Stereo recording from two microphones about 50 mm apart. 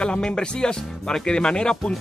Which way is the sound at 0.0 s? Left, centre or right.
Centre.